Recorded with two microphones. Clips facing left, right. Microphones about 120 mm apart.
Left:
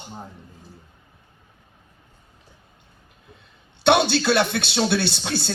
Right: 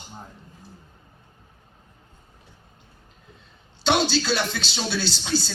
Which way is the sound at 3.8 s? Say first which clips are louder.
Left 4 dB; 60° left (ahead or behind).